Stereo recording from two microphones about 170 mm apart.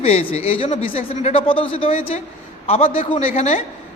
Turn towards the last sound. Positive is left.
turn(degrees=40)  # may be behind; listen again after turning